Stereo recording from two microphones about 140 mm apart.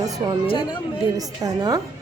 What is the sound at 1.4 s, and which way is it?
Speech, 25° right (ahead or behind).